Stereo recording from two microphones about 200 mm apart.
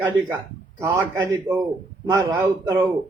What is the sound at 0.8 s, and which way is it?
Mantra, 10° right (ahead or behind).